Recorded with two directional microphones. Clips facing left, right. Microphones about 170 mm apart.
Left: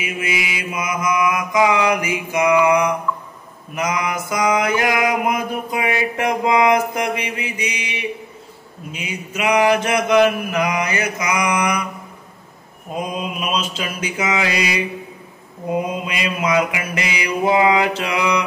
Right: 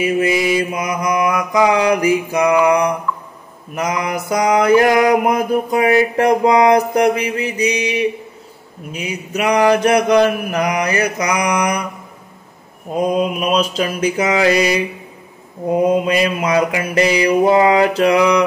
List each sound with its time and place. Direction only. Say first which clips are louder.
0.0 s mantra: right 9 dB; 35° right (ahead or behind)
13.4 s mantra: right 7 dB; 35° right (ahead or behind)
16.1 s mantra: right 5 dB; 35° right (ahead or behind)